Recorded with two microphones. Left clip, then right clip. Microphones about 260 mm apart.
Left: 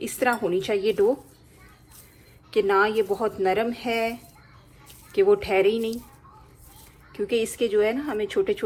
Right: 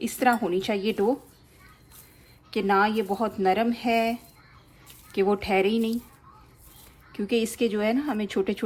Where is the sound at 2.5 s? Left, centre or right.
Right.